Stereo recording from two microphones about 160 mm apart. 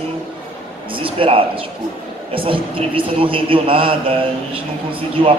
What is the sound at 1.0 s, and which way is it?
A man's voice, 35° right (ahead or behind).